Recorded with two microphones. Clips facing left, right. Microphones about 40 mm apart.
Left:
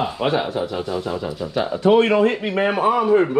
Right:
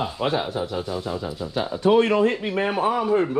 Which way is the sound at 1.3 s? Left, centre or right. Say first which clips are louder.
Left 4 dB; left.